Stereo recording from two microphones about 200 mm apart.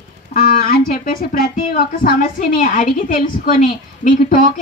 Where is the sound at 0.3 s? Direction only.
45° left (ahead or behind).